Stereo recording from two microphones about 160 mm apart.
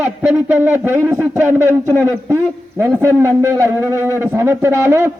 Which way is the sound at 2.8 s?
15° right (ahead or behind).